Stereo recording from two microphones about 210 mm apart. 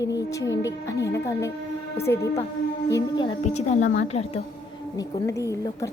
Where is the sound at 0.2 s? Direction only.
15° left (ahead or behind).